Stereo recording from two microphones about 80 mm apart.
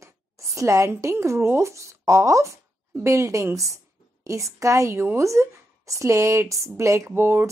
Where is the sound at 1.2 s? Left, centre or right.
Right.